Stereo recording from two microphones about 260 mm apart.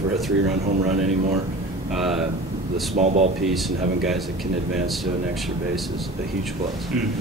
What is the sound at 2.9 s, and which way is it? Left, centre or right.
Speech, right.